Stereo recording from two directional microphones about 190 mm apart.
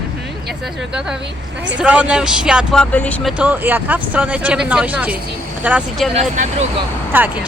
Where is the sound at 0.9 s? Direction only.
5° right (ahead or behind).